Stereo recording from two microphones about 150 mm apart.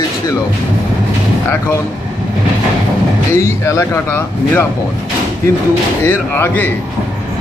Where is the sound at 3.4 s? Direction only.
20° left (ahead or behind).